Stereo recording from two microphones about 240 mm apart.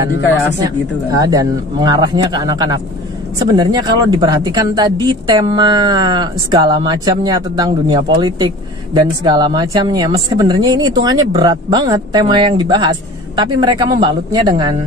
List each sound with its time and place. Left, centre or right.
0.7 s speech: centre